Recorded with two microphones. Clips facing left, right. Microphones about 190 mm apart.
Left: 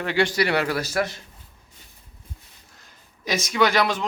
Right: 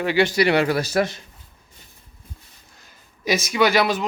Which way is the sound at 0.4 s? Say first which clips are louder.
Right 4 dB; 25° right (ahead or behind).